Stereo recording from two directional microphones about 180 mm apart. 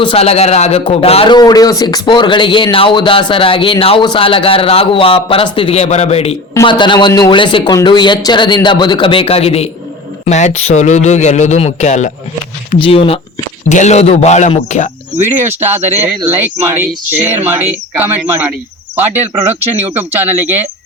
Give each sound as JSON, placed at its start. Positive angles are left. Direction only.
{"t": 0.0, "sound": "a man's voice", "side_deg": 30}
{"t": 6.5, "sound": "a man's voice", "side_deg": 20}
{"t": 13.7, "sound": "speech", "side_deg": 40}
{"t": 15.4, "sound": "speech", "side_deg": -10}